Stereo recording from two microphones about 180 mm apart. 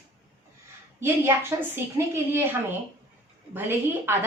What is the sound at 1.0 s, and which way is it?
A woman's voice, 15° right (ahead or behind).